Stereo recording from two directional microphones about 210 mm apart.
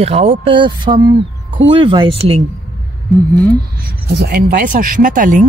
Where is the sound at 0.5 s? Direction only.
25° right (ahead or behind).